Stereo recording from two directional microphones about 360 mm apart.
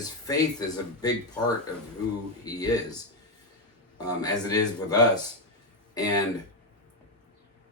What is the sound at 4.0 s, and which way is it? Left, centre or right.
Speech, centre.